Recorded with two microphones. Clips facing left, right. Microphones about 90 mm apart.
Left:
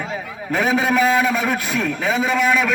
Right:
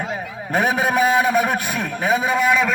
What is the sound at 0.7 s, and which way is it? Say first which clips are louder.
Speech: left 2 dB; 20° right (ahead or behind).